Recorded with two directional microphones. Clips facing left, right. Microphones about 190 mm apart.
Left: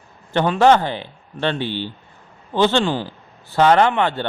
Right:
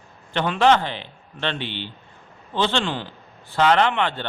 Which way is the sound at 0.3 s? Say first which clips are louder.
Left 4 dB; 40° left (ahead or behind).